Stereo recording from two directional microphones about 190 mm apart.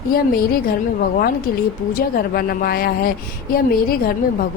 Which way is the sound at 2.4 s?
50° left (ahead or behind).